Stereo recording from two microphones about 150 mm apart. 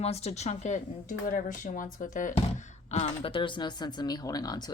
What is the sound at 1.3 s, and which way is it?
Speech, 60° left (ahead or behind).